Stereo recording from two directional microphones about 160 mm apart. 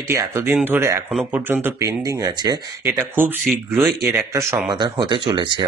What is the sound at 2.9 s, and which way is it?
Speech, 10° right (ahead or behind).